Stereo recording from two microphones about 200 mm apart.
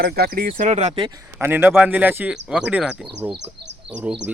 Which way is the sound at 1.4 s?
10° right (ahead or behind).